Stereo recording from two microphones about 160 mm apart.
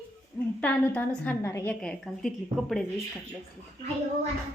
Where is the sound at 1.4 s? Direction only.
20° left (ahead or behind).